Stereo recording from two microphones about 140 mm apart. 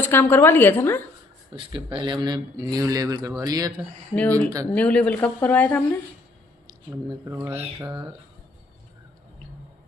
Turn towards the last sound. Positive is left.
turn(degrees=-15)  # may be behind; listen again after turning